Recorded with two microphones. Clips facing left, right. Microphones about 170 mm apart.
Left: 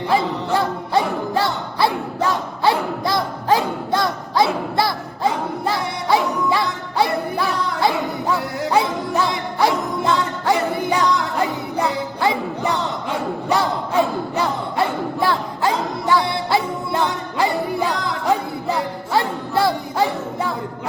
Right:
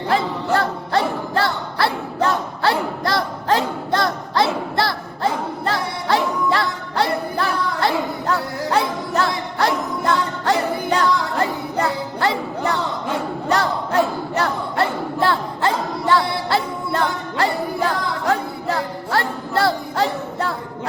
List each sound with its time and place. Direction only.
0.1 s music: 10° left (ahead or behind)